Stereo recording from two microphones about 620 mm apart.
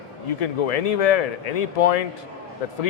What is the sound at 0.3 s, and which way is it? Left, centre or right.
Speech, left.